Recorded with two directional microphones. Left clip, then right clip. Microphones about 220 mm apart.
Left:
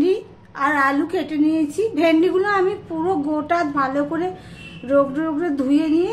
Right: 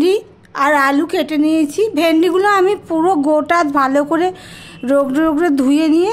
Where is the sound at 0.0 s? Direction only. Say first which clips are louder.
Right 5 dB; 50° right (ahead or behind).